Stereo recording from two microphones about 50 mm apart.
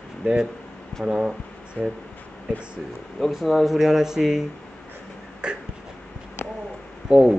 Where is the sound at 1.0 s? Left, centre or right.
Centre.